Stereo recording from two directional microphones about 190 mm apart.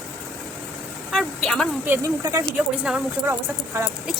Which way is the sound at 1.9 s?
15° right (ahead or behind).